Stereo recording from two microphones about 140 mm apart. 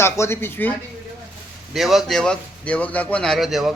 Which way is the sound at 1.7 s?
Centre (ahead or behind).